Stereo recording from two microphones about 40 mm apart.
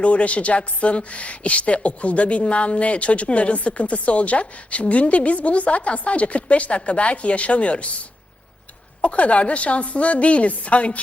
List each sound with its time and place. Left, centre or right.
0.0 s a woman's voice: left